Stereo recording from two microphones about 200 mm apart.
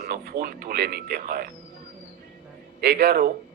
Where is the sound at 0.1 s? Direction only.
50° right (ahead or behind).